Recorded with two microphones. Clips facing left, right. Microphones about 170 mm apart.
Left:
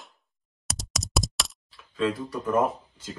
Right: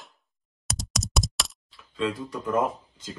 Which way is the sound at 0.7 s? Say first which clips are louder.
Even; centre (ahead or behind).